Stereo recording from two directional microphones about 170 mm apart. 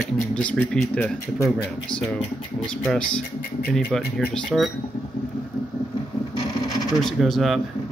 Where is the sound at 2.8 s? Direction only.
5° left (ahead or behind).